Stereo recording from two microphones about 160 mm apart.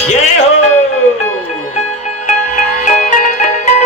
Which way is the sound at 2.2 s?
50° left (ahead or behind).